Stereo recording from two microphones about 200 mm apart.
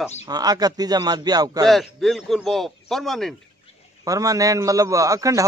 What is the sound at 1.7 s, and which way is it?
A man's voice, centre (ahead or behind).